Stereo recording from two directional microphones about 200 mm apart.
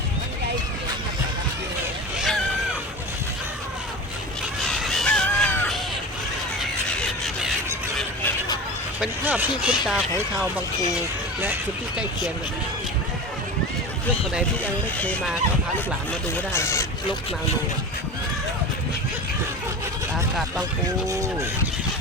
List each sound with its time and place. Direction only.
2.1 s vehicle: centre (ahead or behind)
4.8 s crow: centre (ahead or behind)
6.6 s a sound: 5° left (ahead or behind)
9.0 s speech: 10° right (ahead or behind)
14.6 s speech: 5° left (ahead or behind)
16.5 s speech: 15° left (ahead or behind)
20.8 s speech: 15° right (ahead or behind)